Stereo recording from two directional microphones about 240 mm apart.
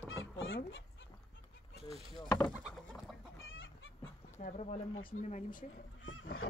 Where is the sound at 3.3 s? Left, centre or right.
Left.